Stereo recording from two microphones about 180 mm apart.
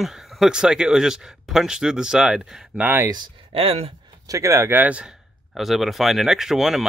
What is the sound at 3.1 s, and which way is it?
Speech, 30° right (ahead or behind).